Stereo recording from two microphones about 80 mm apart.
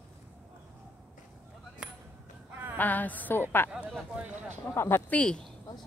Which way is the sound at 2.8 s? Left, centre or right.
Left.